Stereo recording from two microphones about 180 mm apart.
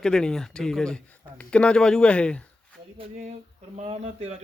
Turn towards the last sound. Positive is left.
turn(degrees=-35)  # may be behind; listen again after turning